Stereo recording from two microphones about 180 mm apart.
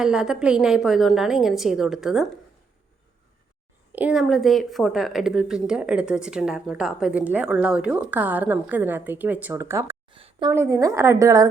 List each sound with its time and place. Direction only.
0.0 s a woman's voice: 5° right (ahead or behind)
3.9 s speech: 5° right (ahead or behind)
10.1 s a sound: 30° right (ahead or behind)
10.5 s speech: 15° right (ahead or behind)